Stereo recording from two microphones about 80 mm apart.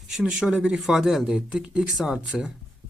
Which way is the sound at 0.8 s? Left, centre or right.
Centre.